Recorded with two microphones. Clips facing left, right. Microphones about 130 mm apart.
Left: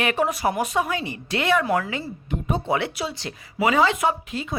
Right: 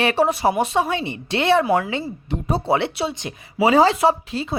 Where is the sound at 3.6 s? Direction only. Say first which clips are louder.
Right 5 dB; 35° right (ahead or behind).